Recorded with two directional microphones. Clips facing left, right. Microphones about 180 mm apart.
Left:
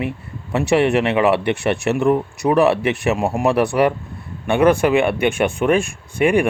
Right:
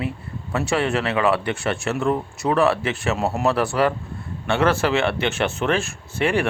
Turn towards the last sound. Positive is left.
turn(degrees=15)  # may be behind; listen again after turning